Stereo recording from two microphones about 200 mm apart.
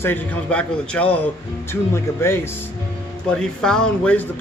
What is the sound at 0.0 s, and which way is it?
Speech, 10° left (ahead or behind).